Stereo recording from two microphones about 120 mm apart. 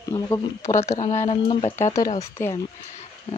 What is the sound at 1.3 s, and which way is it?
Speech, 50° left (ahead or behind).